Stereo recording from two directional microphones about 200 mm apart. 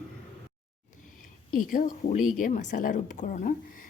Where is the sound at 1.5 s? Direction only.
45° left (ahead or behind).